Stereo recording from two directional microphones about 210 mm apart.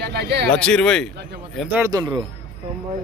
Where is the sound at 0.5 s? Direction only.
5° left (ahead or behind).